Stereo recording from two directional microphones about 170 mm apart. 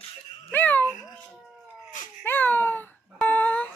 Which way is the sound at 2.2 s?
10° left (ahead or behind).